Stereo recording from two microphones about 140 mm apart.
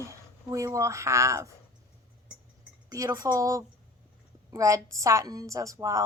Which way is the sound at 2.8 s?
25° right (ahead or behind).